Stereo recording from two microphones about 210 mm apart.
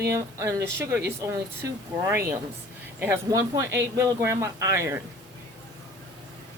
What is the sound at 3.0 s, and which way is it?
A woman's voice, 15° right (ahead or behind).